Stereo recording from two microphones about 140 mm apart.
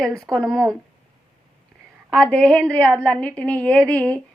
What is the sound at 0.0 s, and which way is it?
Speech, 5° left (ahead or behind).